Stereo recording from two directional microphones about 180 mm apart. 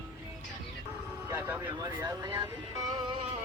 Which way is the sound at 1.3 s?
10° right (ahead or behind).